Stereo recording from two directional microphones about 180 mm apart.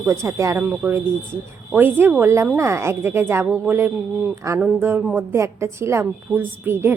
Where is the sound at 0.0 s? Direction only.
15° right (ahead or behind).